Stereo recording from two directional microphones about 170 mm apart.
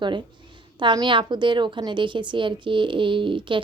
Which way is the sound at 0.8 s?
30° right (ahead or behind).